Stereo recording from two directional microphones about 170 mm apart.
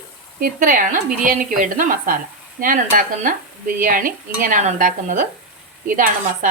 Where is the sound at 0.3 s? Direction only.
55° right (ahead or behind).